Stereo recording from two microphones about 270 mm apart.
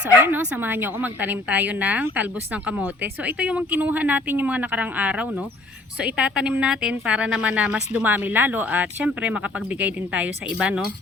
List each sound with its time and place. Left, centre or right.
0.2 s a woman's voice: centre